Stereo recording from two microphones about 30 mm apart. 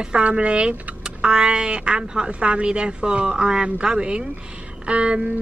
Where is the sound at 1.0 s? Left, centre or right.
Right.